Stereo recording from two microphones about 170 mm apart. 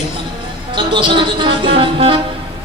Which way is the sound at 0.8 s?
30° right (ahead or behind).